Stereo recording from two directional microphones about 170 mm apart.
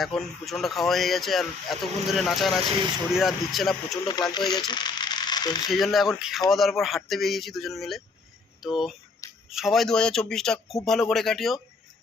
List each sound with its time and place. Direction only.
0.0 s speech: centre (ahead or behind)
4.1 s speech: 25° left (ahead or behind)
4.7 s coin: 25° left (ahead or behind)
5.7 s speech: centre (ahead or behind)